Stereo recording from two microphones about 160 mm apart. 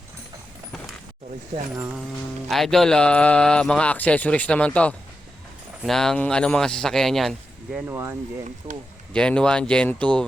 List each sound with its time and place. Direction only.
2.5 s a man's voice: centre (ahead or behind)
7.8 s speech: 15° right (ahead or behind)
8.7 s speech: 30° right (ahead or behind)
9.1 s a man's voice: 5° left (ahead or behind)